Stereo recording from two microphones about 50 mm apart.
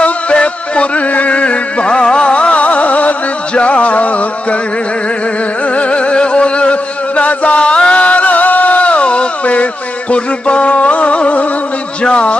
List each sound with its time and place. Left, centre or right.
0.0 s music: left
5.7 s music: left
12.0 s a sound: left